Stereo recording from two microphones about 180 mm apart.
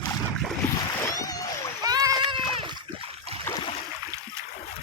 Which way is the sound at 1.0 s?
20° left (ahead or behind).